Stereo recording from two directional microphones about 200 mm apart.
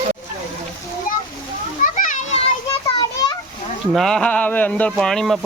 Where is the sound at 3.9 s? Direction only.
5° left (ahead or behind).